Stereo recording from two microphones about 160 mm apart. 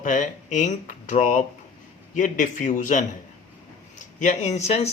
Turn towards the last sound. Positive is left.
turn(degrees=40)  # may be behind; listen again after turning